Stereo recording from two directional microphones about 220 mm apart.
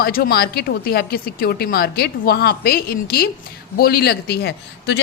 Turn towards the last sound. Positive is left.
turn(degrees=50)  # may be behind; listen again after turning